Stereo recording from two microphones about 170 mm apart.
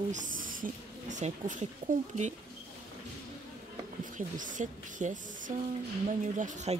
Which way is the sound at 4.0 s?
50° right (ahead or behind).